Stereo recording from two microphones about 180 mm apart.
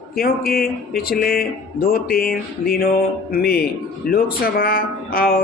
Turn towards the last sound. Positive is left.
turn(degrees=55)  # may be behind; listen again after turning